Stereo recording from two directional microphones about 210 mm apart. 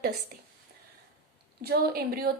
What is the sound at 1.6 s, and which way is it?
Speech, 50° right (ahead or behind).